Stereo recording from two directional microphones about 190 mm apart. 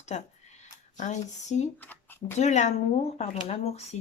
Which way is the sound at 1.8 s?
10° left (ahead or behind).